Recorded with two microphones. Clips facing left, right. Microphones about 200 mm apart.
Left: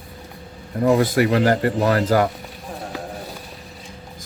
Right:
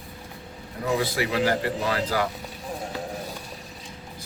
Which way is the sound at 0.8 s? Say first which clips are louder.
Left 9 dB; 50° left (ahead or behind).